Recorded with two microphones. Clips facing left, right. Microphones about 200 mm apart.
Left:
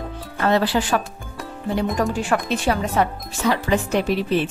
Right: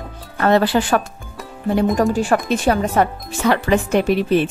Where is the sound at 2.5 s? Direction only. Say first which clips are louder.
Right 4 dB; 50° right (ahead or behind).